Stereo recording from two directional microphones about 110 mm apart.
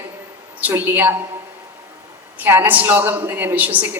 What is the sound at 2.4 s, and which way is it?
A woman's voice, 15° right (ahead or behind).